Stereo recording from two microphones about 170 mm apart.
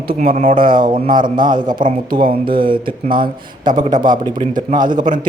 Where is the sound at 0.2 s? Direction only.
55° right (ahead or behind).